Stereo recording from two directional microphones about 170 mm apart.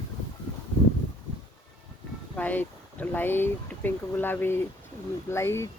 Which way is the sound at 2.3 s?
10° left (ahead or behind).